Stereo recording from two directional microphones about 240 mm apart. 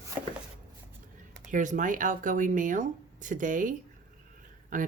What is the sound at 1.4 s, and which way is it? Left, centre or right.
Speech, right.